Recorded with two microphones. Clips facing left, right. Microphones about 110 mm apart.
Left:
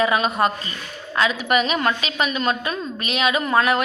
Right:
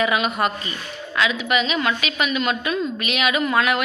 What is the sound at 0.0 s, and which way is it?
A woman's voice, 30° left (ahead or behind).